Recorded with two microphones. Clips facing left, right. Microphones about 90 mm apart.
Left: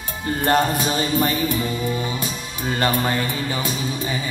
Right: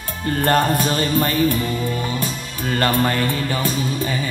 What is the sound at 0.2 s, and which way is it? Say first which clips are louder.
Speech: right 1 dB; 15° left (ahead or behind).